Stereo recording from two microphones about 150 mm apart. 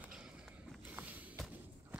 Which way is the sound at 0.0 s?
5° right (ahead or behind).